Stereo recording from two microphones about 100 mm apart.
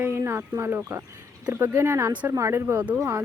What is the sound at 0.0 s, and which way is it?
Speech, 25° right (ahead or behind).